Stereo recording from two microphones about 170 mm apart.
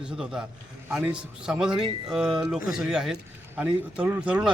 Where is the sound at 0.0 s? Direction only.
5° right (ahead or behind).